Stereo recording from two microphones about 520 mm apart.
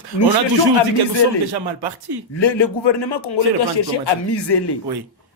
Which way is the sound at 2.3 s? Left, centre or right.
Left.